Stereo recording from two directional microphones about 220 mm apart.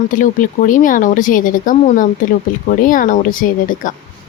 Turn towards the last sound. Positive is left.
turn(degrees=40)  # may be behind; listen again after turning